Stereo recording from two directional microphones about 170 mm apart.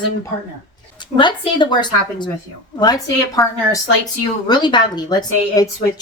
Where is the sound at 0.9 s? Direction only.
30° left (ahead or behind).